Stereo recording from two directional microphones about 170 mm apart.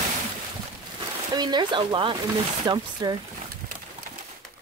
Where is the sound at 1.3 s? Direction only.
25° right (ahead or behind).